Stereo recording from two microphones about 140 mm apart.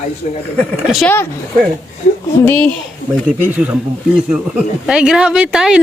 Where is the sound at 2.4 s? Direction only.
10° left (ahead or behind).